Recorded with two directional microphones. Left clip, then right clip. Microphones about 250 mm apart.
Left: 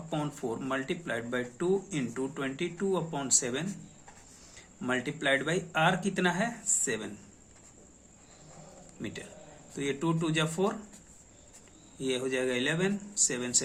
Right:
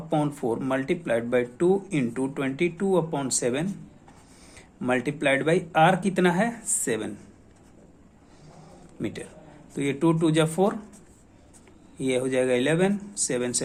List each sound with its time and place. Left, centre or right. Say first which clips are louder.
0.1 s speech: right 9 dB; right
9.0 s a man's voice: right 7 dB; right
11.9 s speech: right 7 dB; right